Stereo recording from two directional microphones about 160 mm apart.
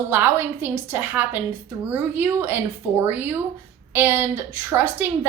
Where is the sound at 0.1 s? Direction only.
10° right (ahead or behind).